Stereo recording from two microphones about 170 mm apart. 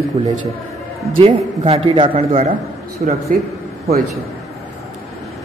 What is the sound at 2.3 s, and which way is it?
Speech, 50° right (ahead or behind).